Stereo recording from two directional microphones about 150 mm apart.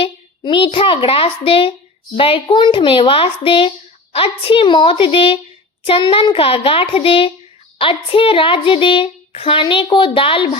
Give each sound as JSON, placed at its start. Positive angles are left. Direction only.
{"t": 0.0, "sound": "a child's voice", "side_deg": 35}